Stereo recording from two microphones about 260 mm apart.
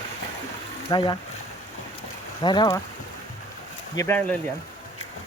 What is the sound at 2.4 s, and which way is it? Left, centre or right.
Speech, centre.